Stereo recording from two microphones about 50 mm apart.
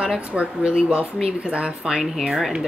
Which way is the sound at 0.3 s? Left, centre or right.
Right.